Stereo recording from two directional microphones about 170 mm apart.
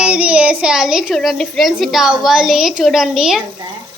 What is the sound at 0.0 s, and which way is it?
A woman's voice, 5° right (ahead or behind).